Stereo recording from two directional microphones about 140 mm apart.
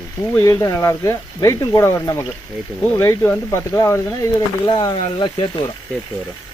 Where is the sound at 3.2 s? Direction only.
20° left (ahead or behind); by 5.5 s 40° left (ahead or behind).